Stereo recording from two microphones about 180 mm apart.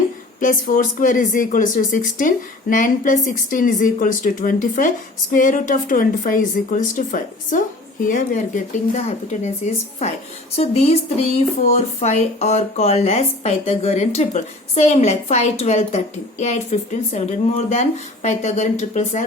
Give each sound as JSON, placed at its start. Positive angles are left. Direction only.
{"t": 0.3, "sound": "a woman's voice", "side_deg": 50}